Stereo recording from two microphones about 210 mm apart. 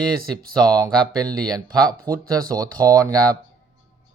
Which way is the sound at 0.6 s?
20° right (ahead or behind).